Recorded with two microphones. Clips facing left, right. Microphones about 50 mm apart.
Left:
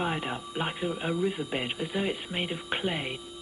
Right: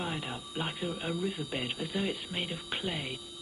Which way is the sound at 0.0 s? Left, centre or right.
Left.